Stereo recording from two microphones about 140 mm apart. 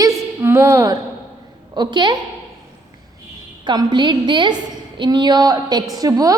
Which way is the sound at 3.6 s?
35° right (ahead or behind).